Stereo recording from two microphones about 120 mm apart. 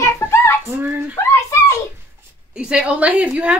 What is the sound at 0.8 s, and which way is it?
Speech, 15° right (ahead or behind).